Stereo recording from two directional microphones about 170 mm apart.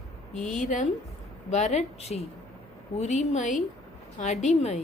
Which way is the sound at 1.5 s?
40° left (ahead or behind).